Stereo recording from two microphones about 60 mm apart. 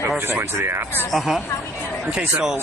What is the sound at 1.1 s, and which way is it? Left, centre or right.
Speech, centre.